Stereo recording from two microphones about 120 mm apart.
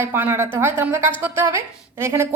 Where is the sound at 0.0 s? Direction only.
20° right (ahead or behind).